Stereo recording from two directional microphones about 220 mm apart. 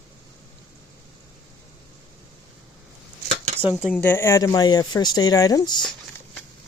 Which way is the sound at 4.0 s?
10° left (ahead or behind).